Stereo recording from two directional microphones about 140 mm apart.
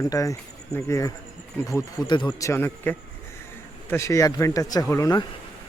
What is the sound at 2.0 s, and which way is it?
Speech, 30° left (ahead or behind).